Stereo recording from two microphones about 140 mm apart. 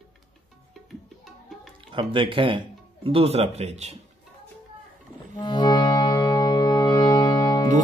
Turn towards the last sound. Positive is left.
turn(degrees=30)  # may be behind; listen again after turning